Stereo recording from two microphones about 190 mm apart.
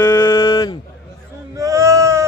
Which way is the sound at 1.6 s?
15° right (ahead or behind).